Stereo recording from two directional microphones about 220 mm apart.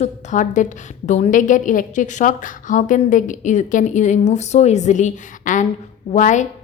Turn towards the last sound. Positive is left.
turn(degrees=35)  # may be behind; listen again after turning